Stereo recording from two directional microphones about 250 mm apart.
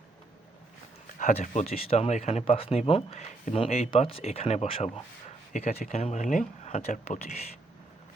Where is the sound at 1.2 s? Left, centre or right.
Left.